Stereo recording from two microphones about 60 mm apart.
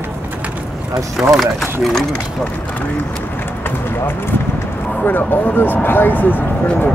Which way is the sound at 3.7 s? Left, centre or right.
Left.